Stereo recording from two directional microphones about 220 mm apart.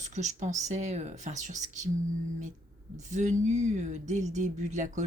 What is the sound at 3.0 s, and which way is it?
Speech, 35° right (ahead or behind).